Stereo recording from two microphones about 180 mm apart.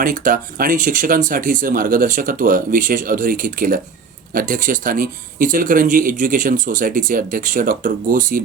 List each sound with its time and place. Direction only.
0.0 s speech: 50° right (ahead or behind)